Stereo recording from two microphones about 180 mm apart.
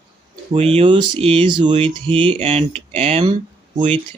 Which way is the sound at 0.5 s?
30° right (ahead or behind).